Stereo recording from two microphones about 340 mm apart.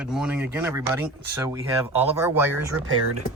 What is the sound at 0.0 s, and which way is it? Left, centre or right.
Speech, centre.